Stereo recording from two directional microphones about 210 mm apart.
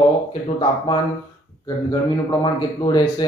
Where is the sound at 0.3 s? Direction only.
25° left (ahead or behind).